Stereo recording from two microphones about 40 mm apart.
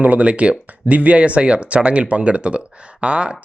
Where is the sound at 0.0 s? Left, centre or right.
Right.